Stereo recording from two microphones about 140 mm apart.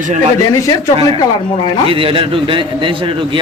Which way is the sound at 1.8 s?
40° right (ahead or behind).